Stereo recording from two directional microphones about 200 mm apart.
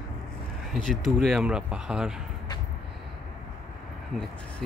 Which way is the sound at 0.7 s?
Centre (ahead or behind).